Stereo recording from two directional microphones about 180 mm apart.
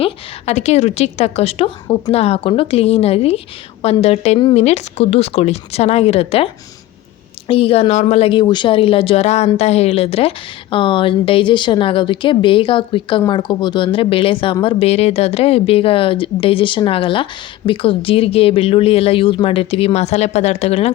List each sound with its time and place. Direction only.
0.0 s a woman's voice: 35° left (ahead or behind)